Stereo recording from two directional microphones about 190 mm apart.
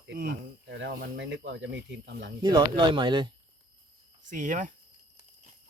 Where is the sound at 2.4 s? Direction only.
25° right (ahead or behind).